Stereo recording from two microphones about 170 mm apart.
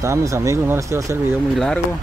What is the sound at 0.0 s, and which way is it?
Speech, 20° right (ahead or behind).